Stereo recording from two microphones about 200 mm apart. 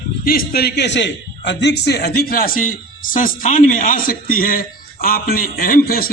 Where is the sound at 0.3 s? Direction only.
50° left (ahead or behind).